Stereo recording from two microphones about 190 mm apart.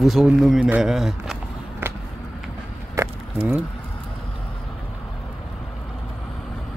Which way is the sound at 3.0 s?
15° right (ahead or behind).